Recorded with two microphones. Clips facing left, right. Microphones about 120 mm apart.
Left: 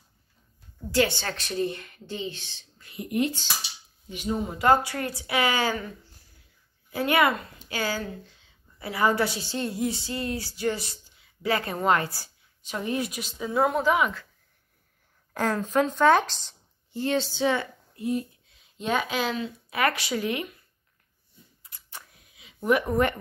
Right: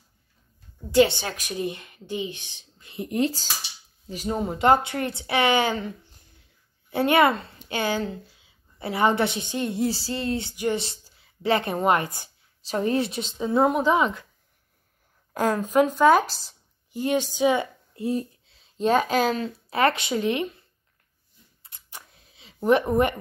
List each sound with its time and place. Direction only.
0.9 s a woman's voice: 20° right (ahead or behind)
2.9 s speech: 30° right (ahead or behind)
4.6 s a woman's voice: 25° right (ahead or behind)
9.8 s a woman's voice: 30° right (ahead or behind)
10.8 s a woman's voice: 30° right (ahead or behind)
12.6 s a woman's voice: 35° right (ahead or behind)
15.3 s a woman's voice: 15° right (ahead or behind)
17.9 s speech: 35° right (ahead or behind)
19.8 s a woman's voice: 25° right (ahead or behind)
21.6 s a sound: 25° right (ahead or behind)